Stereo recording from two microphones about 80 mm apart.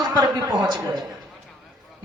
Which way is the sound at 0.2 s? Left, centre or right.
Right.